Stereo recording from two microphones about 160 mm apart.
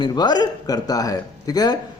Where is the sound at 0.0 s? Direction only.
25° left (ahead or behind).